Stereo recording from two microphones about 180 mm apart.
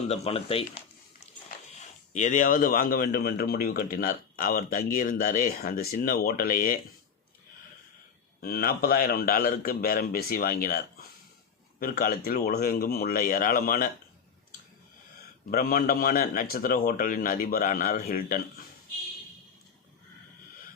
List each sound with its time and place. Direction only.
0.1 s speech: 35° left (ahead or behind)
2.1 s a man's voice: 45° left (ahead or behind)
8.4 s a man's voice: 55° left (ahead or behind)
15.4 s a man's voice: 55° left (ahead or behind)